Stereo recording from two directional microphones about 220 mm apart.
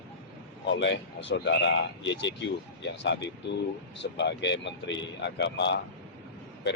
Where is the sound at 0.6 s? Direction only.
55° left (ahead or behind).